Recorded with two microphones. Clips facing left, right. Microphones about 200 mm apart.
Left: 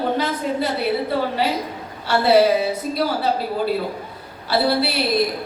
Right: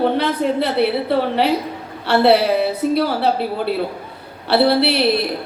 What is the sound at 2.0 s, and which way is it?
A woman's voice, 65° right (ahead or behind).